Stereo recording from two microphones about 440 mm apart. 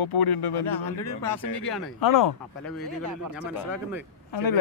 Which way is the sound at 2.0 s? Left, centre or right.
Left.